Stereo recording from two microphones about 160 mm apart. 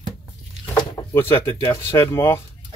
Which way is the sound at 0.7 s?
15° left (ahead or behind).